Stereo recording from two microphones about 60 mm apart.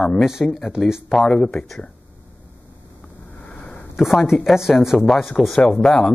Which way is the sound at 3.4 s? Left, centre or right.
Centre.